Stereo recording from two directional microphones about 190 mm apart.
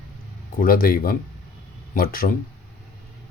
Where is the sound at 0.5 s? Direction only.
50° left (ahead or behind).